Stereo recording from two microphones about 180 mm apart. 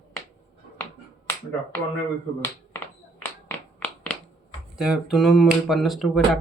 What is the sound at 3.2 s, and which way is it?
Music, 10° left (ahead or behind).